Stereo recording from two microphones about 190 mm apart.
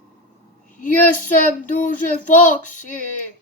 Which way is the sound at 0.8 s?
45° left (ahead or behind).